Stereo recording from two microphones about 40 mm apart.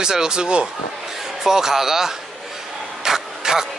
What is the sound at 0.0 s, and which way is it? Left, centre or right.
Speech, centre.